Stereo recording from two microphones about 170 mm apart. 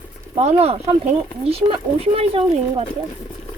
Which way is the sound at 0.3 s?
40° right (ahead or behind).